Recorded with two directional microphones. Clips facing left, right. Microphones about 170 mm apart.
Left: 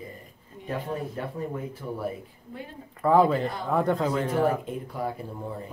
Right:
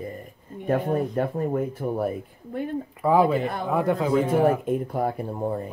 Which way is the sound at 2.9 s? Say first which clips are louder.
Even; 10° right (ahead or behind).